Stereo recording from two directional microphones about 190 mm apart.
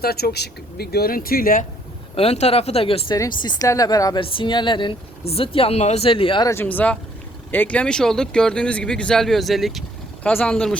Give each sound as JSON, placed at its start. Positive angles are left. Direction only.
{"t": 0.0, "sound": "speech", "side_deg": 55}
{"t": 2.1, "sound": "speech", "side_deg": 35}
{"t": 6.5, "sound": "speech", "side_deg": 10}